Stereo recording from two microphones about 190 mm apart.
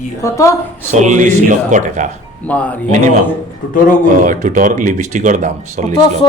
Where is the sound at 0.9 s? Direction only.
40° right (ahead or behind).